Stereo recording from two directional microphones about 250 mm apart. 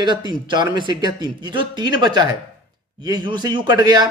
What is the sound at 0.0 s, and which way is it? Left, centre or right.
Speech, centre.